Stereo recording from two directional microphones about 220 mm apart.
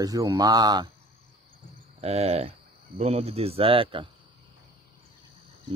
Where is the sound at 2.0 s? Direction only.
30° right (ahead or behind).